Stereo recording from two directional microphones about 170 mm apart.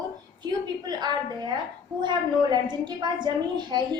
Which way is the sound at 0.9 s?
25° right (ahead or behind).